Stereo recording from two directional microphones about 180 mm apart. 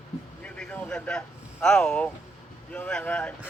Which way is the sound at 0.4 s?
5° left (ahead or behind).